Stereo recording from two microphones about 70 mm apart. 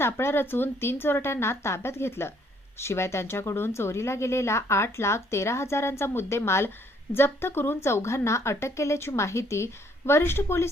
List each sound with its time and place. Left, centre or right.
0.0 s speech: left